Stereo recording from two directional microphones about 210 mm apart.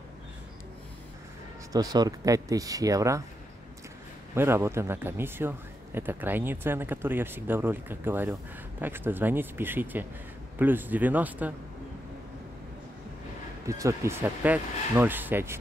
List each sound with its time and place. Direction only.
1.7 s speech: 15° right (ahead or behind)
4.4 s speech: 10° right (ahead or behind)
13.7 s speech: 15° right (ahead or behind)